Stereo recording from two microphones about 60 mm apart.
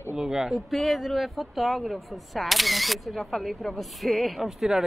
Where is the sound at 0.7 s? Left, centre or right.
Centre.